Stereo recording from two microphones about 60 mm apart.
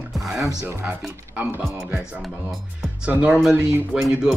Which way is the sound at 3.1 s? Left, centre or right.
Right.